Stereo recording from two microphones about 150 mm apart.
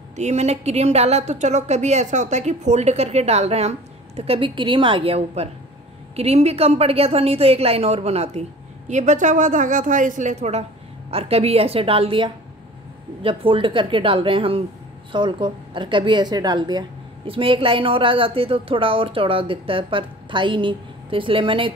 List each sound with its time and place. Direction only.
0.2 s a woman's voice: 50° right (ahead or behind)